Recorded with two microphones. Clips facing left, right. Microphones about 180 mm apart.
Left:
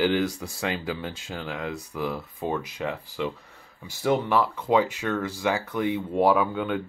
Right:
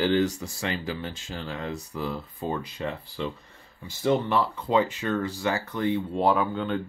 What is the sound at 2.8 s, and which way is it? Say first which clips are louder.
Speech: left 1 dB; 10° left (ahead or behind).